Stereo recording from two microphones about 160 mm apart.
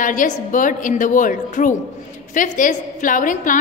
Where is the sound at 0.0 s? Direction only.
55° left (ahead or behind).